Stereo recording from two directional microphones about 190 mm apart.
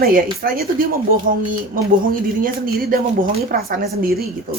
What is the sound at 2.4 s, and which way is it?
Speech, 50° right (ahead or behind).